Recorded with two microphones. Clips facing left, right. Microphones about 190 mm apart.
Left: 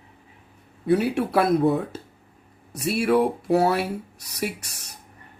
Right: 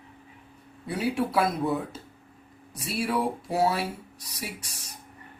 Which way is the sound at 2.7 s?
65° left (ahead or behind).